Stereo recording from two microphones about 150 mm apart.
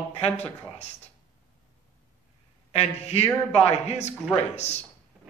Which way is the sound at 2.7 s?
45° left (ahead or behind).